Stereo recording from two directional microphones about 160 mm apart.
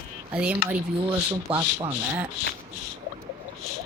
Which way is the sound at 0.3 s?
10° right (ahead or behind).